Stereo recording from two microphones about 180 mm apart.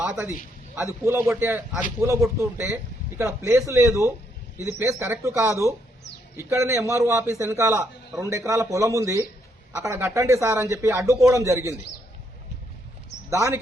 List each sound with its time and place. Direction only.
1.0 s a man's voice: 15° right (ahead or behind)
13.3 s a man's voice: 15° right (ahead or behind)